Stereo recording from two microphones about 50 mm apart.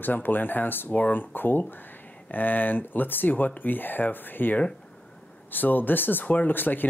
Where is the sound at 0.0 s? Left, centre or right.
Left.